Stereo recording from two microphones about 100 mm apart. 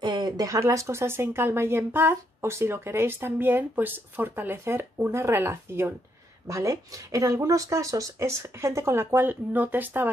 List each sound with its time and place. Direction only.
0.0 s speech: 45° right (ahead or behind); by 10.1 s 20° right (ahead or behind)